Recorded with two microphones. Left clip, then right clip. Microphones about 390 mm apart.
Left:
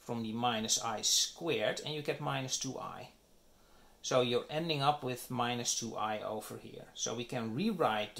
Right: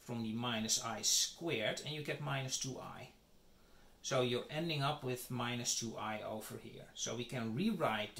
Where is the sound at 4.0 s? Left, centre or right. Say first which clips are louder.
Left 5 dB; centre.